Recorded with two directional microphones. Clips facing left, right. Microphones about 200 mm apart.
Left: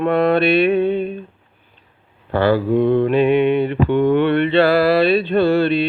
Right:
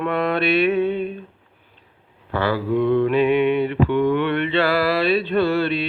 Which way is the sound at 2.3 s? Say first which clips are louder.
Left 5 dB; 30° left (ahead or behind).